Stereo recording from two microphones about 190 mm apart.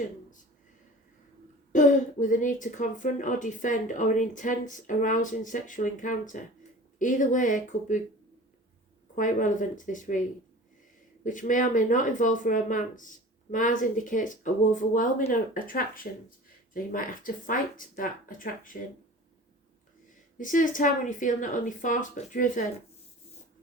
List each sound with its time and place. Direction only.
1.7 s speech: 40° left (ahead or behind)
9.1 s speech: 40° left (ahead or behind)
20.4 s speech: 45° left (ahead or behind)